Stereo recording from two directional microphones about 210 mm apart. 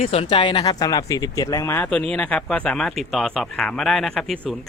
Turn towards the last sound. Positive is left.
turn(degrees=0)  # may be behind; listen again after turning